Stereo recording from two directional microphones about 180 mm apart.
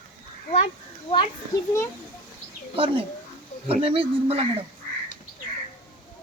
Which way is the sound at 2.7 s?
30° right (ahead or behind).